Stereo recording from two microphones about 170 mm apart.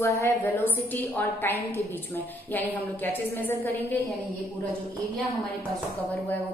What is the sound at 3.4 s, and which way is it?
Speech, 10° left (ahead or behind).